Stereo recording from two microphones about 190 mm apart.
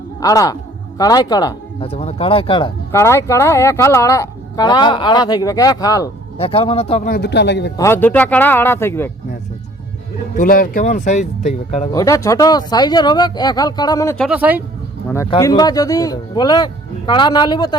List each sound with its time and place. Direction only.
0.2 s speech: 20° left (ahead or behind)
2.9 s speech: 15° left (ahead or behind)
6.4 s speech: 30° left (ahead or behind)
7.1 s speech: 65° left (ahead or behind)
7.8 s speech: 10° left (ahead or behind)
10.3 s speech: 45° left (ahead or behind)
11.9 s speech: 15° left (ahead or behind)
14.3 s speech: 10° right (ahead or behind)
15.4 s speech: 20° left (ahead or behind)